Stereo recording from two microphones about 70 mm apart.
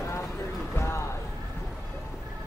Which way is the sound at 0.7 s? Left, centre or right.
Left.